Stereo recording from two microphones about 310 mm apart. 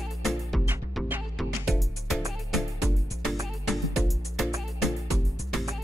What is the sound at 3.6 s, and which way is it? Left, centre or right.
Music, centre.